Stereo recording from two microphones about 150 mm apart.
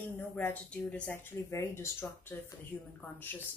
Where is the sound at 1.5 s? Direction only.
15° left (ahead or behind).